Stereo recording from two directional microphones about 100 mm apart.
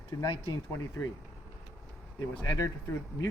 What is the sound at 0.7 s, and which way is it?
Speech, 35° left (ahead or behind).